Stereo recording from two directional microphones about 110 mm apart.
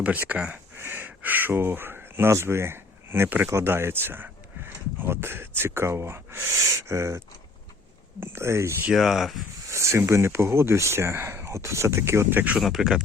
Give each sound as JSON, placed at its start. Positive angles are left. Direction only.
{"t": 0.0, "sound": "speech", "side_deg": -15}
{"t": 8.2, "sound": "speech", "side_deg": -20}
{"t": 8.9, "sound": "speech", "side_deg": -5}
{"t": 9.6, "sound": "speech", "side_deg": -25}
{"t": 12.5, "sound": "speech", "side_deg": 0}